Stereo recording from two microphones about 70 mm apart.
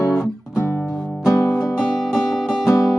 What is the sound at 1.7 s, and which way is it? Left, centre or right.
Music, centre.